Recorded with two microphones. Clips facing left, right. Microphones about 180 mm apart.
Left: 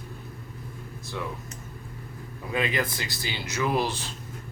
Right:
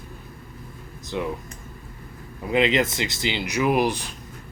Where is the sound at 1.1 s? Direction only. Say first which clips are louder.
Right 6 dB; 20° right (ahead or behind).